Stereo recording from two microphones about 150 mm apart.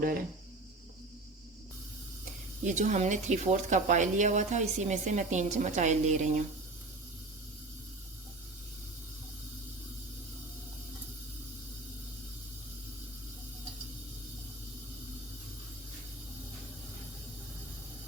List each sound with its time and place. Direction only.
2.6 s speech: 55° right (ahead or behind)